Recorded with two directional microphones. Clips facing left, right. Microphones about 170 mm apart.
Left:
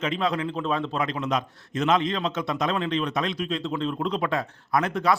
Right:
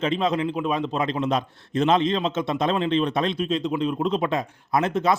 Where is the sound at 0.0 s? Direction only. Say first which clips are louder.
Right 3 dB; 25° right (ahead or behind).